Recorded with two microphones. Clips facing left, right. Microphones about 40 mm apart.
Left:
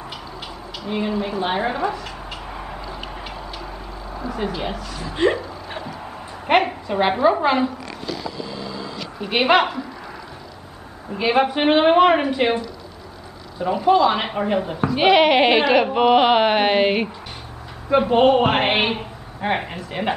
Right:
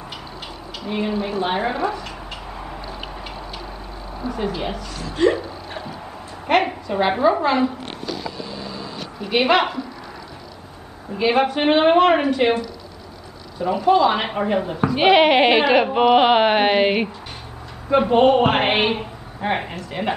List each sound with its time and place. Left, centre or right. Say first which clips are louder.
0.8 s speech: even; centre
2.5 s a sound: left 1 dB; centre
4.3 s speech: right 1 dB; centre
5.1 s hiccup: right 1 dB; centre
6.5 s a woman's voice: left 1 dB; left
6.9 s speech: even; centre
9.2 s speech: left 1 dB; centre
11.1 s speech: even; centre
13.6 s speech: even; centre